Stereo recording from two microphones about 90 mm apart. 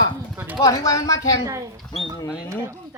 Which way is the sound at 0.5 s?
45° left (ahead or behind).